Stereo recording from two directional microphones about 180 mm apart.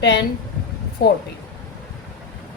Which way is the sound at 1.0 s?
75° left (ahead or behind).